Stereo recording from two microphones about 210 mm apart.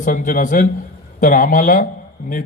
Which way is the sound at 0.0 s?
40° left (ahead or behind).